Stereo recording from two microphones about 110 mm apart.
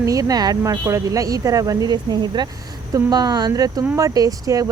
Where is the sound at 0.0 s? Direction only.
30° right (ahead or behind).